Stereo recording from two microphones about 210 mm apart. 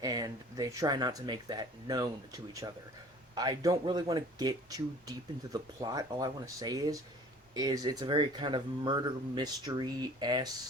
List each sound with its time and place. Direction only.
0.0 s speech: 15° right (ahead or behind)